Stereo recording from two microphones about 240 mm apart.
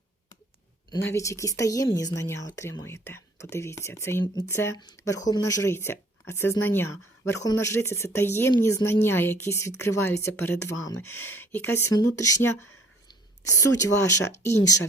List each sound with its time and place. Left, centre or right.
1.1 s speech: centre
13.1 s a sound: centre
14.3 s speech: centre